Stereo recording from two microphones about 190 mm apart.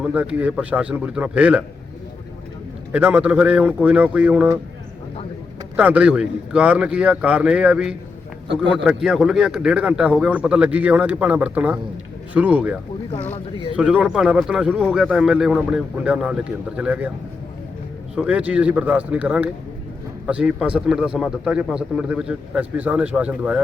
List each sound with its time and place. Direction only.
0.0 s a man's voice: 10° right (ahead or behind)
2.9 s a man's voice: 10° right (ahead or behind)
5.7 s a man's voice: 10° right (ahead or behind)
18.1 s a man's voice: 5° right (ahead or behind)